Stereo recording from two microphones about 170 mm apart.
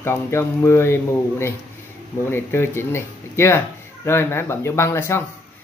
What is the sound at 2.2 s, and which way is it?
Speech, 15° left (ahead or behind).